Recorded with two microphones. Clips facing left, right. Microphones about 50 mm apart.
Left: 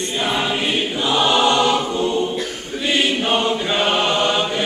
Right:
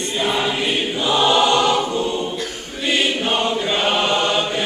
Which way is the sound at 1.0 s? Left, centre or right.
Centre.